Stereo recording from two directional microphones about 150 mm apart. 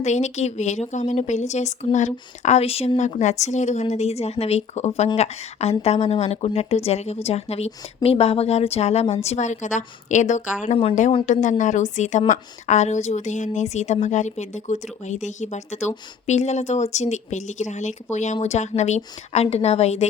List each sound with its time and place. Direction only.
0.0 s a woman's voice: 50° left (ahead or behind)